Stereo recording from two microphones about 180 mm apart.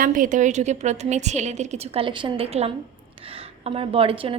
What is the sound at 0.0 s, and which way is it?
A woman's voice, 50° right (ahead or behind).